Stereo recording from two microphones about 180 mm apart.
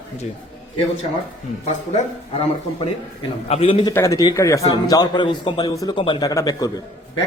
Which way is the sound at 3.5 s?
35° left (ahead or behind).